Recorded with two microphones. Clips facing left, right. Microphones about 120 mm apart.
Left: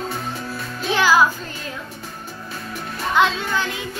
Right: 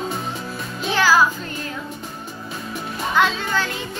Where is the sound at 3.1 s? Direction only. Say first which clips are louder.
Left 1 dB; 15° left (ahead or behind).